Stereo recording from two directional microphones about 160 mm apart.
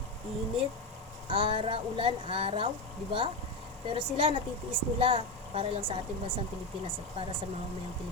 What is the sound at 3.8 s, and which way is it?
Speech, 35° right (ahead or behind).